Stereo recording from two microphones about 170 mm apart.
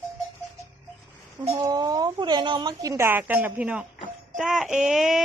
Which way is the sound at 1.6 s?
25° right (ahead or behind).